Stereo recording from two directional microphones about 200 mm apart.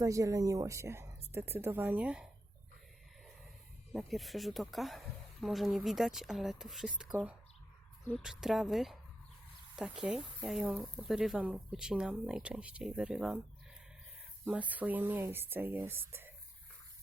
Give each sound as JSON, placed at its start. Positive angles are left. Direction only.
{"t": 0.0, "sound": "a woman's voice", "side_deg": -15}
{"t": 3.9, "sound": "speech", "side_deg": 0}
{"t": 14.7, "sound": "a woman's voice", "side_deg": -10}